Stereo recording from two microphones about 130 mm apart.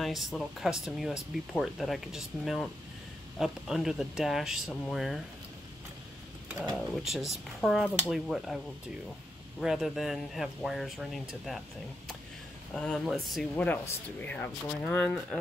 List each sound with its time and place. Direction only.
0.0 s speech: centre (ahead or behind)
6.9 s speech: centre (ahead or behind)
9.6 s speech: 5° right (ahead or behind)
12.7 s speech: 5° left (ahead or behind)